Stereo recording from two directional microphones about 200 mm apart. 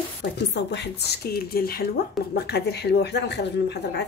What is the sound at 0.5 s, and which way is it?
A woman's voice, 55° left (ahead or behind).